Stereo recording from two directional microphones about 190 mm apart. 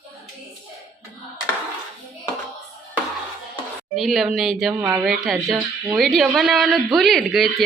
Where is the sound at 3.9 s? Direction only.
Centre (ahead or behind).